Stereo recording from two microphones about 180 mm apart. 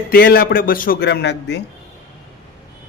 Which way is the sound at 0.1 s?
55° left (ahead or behind).